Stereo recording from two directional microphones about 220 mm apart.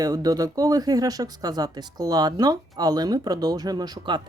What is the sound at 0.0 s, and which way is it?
Speech, 15° right (ahead or behind).